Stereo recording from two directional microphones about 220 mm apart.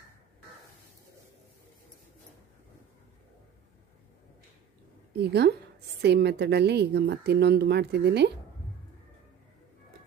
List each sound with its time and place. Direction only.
5.3 s a woman's voice: 45° right (ahead or behind)